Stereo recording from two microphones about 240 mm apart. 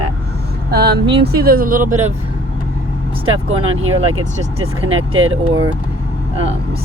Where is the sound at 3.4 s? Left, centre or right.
Right.